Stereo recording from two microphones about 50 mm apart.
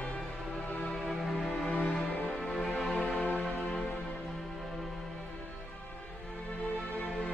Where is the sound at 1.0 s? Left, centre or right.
Centre.